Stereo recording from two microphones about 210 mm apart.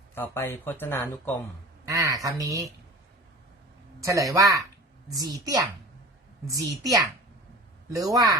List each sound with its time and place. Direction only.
0.1 s speech: 10° left (ahead or behind)
1.8 s speech: 15° right (ahead or behind)
4.0 s speech: 15° right (ahead or behind)